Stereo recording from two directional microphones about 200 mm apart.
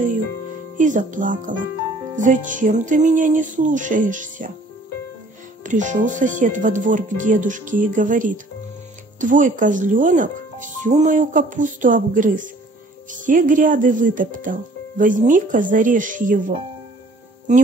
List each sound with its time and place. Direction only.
0.7 s speech: 40° right (ahead or behind)
5.6 s speech: 40° right (ahead or behind)